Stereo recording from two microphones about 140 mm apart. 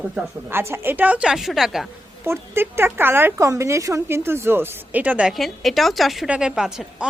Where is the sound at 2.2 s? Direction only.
15° right (ahead or behind).